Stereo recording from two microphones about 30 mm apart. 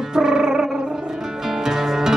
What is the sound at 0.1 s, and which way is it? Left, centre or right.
Music, centre.